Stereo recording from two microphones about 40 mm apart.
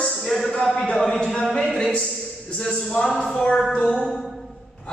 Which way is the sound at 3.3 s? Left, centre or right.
Left.